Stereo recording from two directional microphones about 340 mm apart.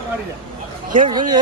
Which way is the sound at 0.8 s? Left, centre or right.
Right.